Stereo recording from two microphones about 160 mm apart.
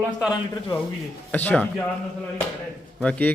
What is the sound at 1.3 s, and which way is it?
Speech, 10° left (ahead or behind).